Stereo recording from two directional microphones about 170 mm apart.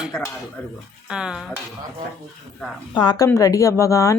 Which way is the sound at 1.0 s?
5° right (ahead or behind).